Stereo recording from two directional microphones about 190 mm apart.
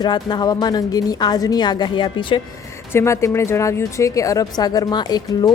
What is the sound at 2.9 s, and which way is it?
A woman's voice, 15° left (ahead or behind).